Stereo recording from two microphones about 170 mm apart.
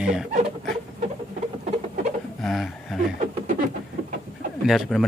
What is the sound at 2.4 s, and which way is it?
Speech, centre (ahead or behind).